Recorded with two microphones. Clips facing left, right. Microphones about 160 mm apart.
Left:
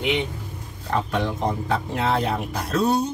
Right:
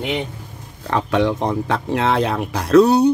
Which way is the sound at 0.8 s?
90° right.